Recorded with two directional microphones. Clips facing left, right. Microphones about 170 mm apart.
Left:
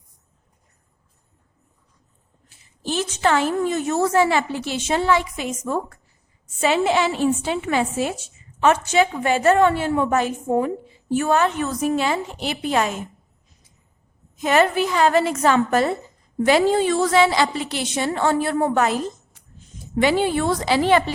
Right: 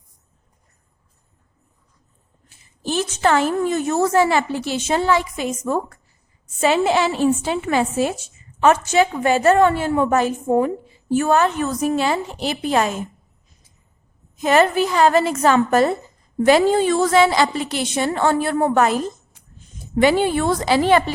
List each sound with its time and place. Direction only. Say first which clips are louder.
2.5 s a woman's voice: right 2 dB; 45° right (ahead or behind)
14.4 s a woman's voice: right 2 dB; 40° right (ahead or behind)
20.0 s a woman's voice: right 2 dB; 50° right (ahead or behind)